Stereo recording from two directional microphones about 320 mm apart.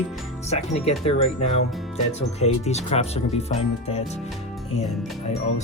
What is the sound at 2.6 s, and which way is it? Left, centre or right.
Speech, centre.